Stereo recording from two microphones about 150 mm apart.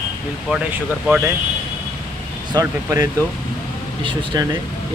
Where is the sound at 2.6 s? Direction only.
20° right (ahead or behind).